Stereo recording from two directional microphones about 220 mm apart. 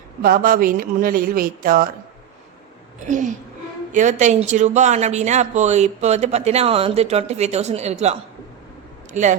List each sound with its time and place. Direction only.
0.2 s speech: 40° right (ahead or behind)
3.1 s speech: 35° right (ahead or behind)